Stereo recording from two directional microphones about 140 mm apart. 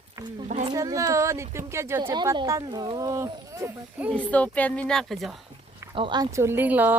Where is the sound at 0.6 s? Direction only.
25° right (ahead or behind).